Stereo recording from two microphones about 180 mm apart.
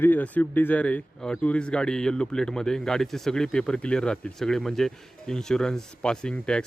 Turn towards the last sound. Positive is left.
turn(degrees=5)  # may be behind; listen again after turning